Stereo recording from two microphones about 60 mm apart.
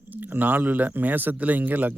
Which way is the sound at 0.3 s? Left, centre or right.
Right.